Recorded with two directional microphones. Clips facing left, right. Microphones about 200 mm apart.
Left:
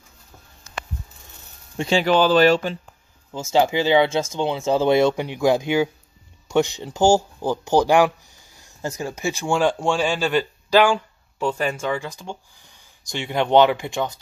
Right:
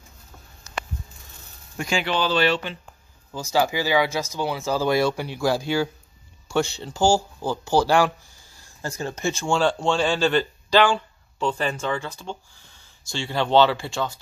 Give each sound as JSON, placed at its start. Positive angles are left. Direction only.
{"t": 1.8, "sound": "speech", "side_deg": 35}
{"t": 3.3, "sound": "speech", "side_deg": 25}